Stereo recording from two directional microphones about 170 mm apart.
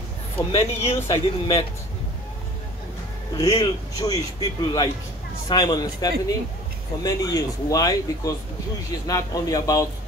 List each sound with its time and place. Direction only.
0.4 s speech: 35° left (ahead or behind)
0.9 s a man's voice: 20° left (ahead or behind)
3.3 s a man's voice: 20° left (ahead or behind)